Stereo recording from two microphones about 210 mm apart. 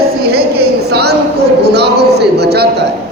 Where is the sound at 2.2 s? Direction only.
50° right (ahead or behind).